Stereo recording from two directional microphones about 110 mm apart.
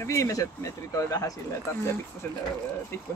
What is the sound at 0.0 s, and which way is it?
Speech, 30° left (ahead or behind).